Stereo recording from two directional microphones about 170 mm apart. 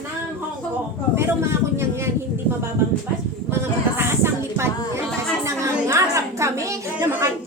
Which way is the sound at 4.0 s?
15° right (ahead or behind).